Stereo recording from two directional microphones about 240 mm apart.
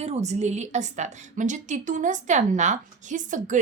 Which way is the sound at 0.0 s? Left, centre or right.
Right.